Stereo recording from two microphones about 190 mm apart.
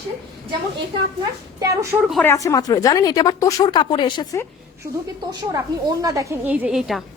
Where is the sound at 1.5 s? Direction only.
15° right (ahead or behind).